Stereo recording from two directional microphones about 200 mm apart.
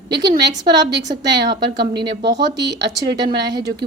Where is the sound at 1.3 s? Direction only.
55° right (ahead or behind).